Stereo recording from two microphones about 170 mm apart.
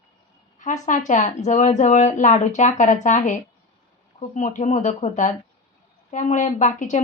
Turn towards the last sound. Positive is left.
turn(degrees=45)  # may be behind; listen again after turning